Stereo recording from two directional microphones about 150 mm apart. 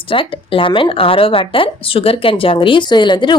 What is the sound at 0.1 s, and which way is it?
Speech, 35° left (ahead or behind).